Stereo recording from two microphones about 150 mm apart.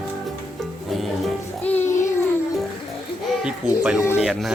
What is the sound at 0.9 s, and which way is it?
Music, centre (ahead or behind).